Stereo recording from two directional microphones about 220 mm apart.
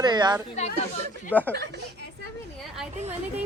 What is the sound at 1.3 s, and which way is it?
Speech, 5° left (ahead or behind).